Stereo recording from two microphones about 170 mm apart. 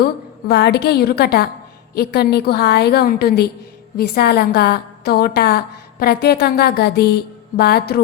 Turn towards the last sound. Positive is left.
turn(degrees=70)  # may be behind; listen again after turning